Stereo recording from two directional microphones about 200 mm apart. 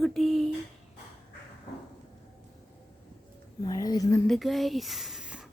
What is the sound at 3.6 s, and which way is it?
Speech, 20° left (ahead or behind).